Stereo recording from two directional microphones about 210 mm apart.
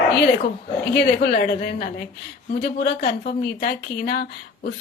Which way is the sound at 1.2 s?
50° left (ahead or behind).